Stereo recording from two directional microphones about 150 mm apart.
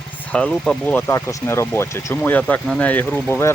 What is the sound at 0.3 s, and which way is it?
Speech, 5° left (ahead or behind).